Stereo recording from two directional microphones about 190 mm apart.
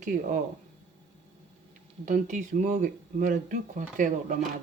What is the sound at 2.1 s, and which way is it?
Speech, 40° right (ahead or behind).